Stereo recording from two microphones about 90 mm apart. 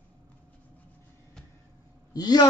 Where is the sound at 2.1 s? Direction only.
50° left (ahead or behind).